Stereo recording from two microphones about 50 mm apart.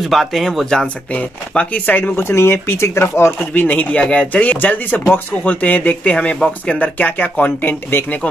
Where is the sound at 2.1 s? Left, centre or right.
Left.